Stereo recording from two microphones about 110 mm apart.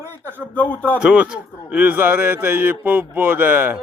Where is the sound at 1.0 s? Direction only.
10° right (ahead or behind).